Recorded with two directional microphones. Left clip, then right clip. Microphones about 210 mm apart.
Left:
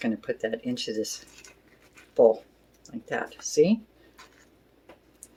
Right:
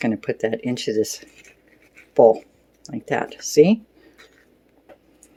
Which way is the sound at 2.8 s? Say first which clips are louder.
Right 7 dB; 40° right (ahead or behind).